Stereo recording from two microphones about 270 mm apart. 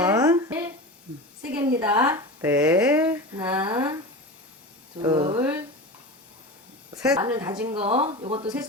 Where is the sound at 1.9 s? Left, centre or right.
Centre.